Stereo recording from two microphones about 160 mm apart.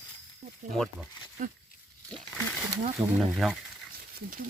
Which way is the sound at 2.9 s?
Centre (ahead or behind).